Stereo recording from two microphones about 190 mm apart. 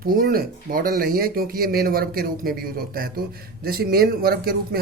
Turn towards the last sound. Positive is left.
turn(degrees=-55)  # may be behind; listen again after turning